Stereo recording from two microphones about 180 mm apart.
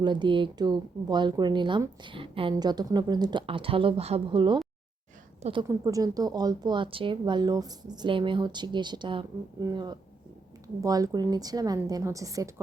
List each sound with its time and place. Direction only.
0.0 s a woman's voice: 25° right (ahead or behind)